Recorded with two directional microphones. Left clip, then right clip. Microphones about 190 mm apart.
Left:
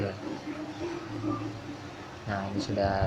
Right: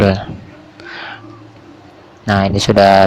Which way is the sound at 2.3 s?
50° right (ahead or behind).